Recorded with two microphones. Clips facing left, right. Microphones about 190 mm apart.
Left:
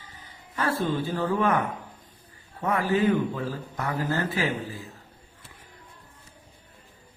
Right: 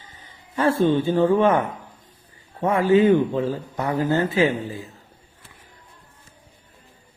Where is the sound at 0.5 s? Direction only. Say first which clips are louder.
Right 8 dB; 25° right (ahead or behind).